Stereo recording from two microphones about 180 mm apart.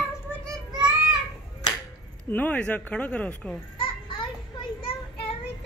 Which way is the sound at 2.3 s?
10° left (ahead or behind).